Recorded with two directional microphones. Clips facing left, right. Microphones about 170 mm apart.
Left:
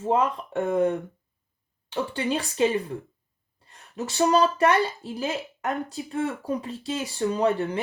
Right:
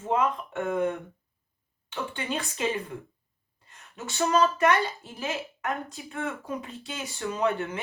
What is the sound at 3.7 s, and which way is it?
Speech, 35° left (ahead or behind).